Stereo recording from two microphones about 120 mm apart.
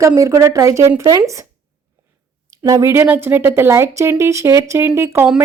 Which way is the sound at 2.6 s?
30° right (ahead or behind).